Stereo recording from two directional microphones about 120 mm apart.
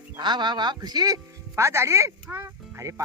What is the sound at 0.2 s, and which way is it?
A man's voice, 40° right (ahead or behind).